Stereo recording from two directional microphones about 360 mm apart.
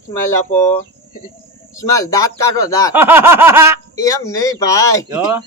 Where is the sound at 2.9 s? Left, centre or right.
Centre.